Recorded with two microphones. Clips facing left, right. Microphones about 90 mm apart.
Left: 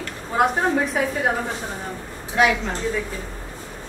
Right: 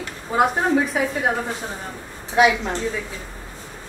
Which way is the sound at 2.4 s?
15° right (ahead or behind).